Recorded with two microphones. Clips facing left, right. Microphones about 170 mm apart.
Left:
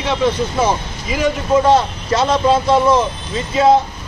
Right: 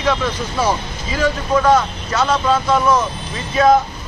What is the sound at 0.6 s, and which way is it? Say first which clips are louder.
Speech: right 1 dB; 15° left (ahead or behind).